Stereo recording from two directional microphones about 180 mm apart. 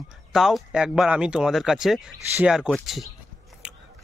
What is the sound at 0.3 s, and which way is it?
Speech, centre (ahead or behind).